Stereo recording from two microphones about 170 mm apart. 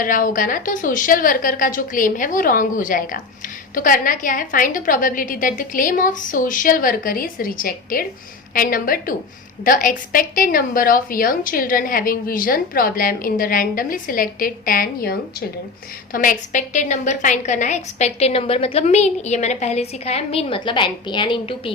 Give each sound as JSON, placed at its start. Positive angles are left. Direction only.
{"t": 0.0, "sound": "a woman's voice", "side_deg": 55}
{"t": 16.1, "sound": "a woman's voice", "side_deg": 50}